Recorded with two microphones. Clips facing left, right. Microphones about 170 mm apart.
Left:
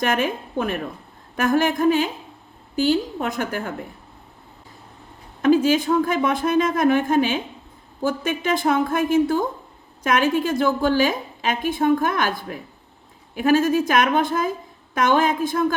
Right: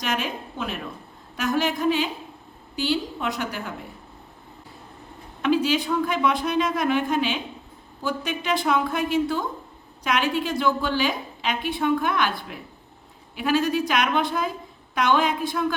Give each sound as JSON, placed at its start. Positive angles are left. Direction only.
{"t": 0.0, "sound": "a woman's voice", "side_deg": 50}
{"t": 5.4, "sound": "a woman's voice", "side_deg": 45}